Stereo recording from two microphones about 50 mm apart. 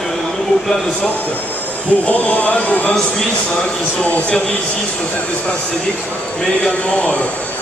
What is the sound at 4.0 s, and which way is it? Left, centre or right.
Speech, left.